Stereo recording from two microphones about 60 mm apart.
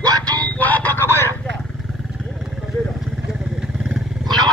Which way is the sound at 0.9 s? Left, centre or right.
Left.